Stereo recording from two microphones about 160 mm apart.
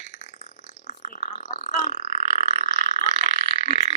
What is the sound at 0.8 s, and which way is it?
Burping, 45° left (ahead or behind).